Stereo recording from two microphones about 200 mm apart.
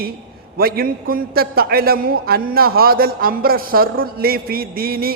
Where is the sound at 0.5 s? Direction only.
50° right (ahead or behind).